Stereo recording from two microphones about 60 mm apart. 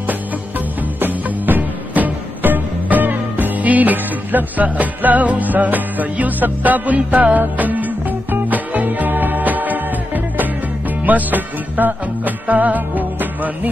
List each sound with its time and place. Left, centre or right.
0.9 s music: right